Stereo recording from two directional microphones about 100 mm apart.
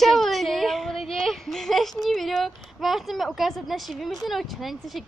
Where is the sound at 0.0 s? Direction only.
Centre (ahead or behind).